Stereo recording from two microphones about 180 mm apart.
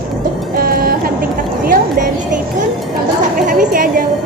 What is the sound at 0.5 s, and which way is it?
Music, 55° right (ahead or behind).